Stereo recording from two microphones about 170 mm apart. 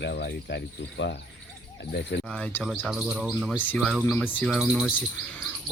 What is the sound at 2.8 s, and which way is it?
Speech, 5° right (ahead or behind).